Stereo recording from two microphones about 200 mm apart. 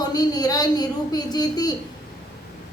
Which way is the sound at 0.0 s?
20° left (ahead or behind).